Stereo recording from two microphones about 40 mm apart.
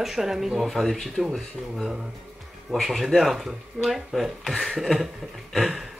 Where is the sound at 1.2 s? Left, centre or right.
Centre.